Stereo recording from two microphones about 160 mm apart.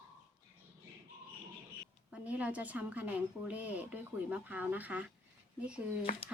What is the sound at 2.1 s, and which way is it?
A woman's voice, 10° right (ahead or behind).